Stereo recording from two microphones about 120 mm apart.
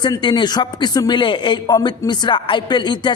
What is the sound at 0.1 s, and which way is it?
Speech, 40° left (ahead or behind).